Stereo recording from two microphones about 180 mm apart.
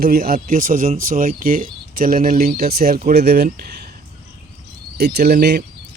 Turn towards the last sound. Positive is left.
turn(degrees=-65)  # may be behind; listen again after turning